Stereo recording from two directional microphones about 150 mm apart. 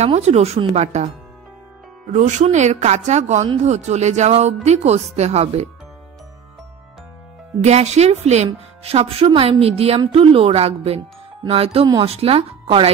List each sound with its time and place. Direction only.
0.0 s a woman's voice: 45° right (ahead or behind)
2.1 s a woman's voice: 55° right (ahead or behind)
7.6 s a woman's voice: 45° right (ahead or behind)